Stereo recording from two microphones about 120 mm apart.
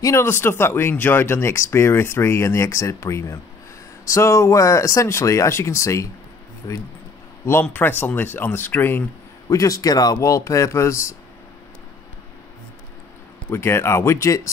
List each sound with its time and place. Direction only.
0.0 s speech: 20° left (ahead or behind)
7.6 s speech: 15° left (ahead or behind)
9.5 s speech: 30° left (ahead or behind)
13.5 s speech: 20° left (ahead or behind)